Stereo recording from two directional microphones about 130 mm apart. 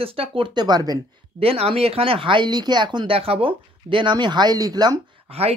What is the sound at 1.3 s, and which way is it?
Speech, 50° right (ahead or behind).